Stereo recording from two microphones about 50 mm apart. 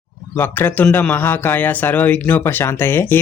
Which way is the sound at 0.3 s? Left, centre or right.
Left.